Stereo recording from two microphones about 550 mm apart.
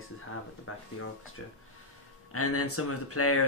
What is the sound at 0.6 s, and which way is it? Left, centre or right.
Speech, left.